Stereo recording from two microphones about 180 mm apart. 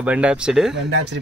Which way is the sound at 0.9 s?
70° right (ahead or behind).